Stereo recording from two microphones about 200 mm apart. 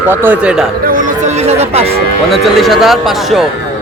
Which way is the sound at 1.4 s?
30° right (ahead or behind).